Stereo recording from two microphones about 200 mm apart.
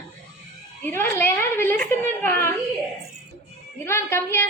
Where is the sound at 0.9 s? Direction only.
10° left (ahead or behind).